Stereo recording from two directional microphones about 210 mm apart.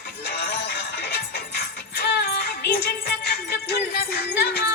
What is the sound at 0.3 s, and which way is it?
Music, 50° left (ahead or behind).